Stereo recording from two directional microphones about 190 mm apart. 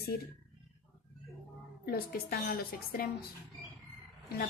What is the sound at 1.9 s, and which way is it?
A woman's voice, 50° left (ahead or behind).